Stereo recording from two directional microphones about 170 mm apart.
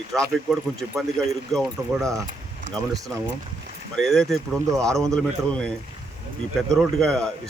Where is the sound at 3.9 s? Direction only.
Centre (ahead or behind).